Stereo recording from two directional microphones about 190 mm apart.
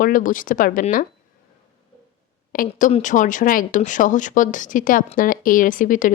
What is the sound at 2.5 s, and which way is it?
Speech, 45° left (ahead or behind).